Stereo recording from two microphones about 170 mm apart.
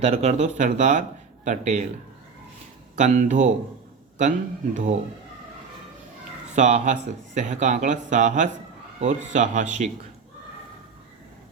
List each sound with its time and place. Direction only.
0.0 s speech: 40° right (ahead or behind)
3.0 s speech: 45° right (ahead or behind)
6.5 s speech: 40° right (ahead or behind)